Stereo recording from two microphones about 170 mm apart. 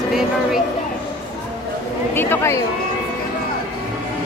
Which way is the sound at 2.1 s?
15° left (ahead or behind).